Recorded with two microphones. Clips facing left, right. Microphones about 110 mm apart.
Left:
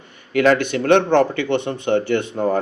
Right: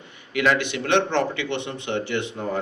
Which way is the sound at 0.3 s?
45° left (ahead or behind).